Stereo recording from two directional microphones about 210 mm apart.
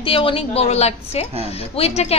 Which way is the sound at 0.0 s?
25° left (ahead or behind).